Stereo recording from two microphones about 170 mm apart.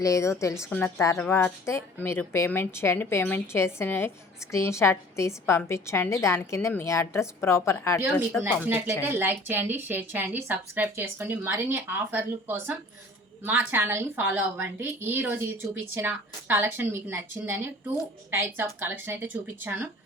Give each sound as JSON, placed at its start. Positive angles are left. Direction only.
{"t": 0.0, "sound": "a woman's voice", "side_deg": 15}
{"t": 8.4, "sound": "a woman's voice", "side_deg": -10}